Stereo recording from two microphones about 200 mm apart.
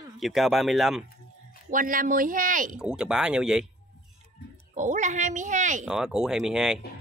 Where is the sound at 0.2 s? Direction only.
Centre (ahead or behind).